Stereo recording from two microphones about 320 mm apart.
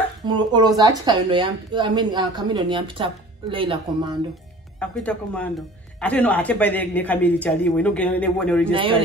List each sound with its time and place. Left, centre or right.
0.3 s speech: centre
4.7 s speech: centre
8.7 s speech: centre